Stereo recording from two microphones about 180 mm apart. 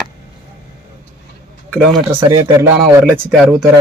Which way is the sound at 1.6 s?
5° left (ahead or behind).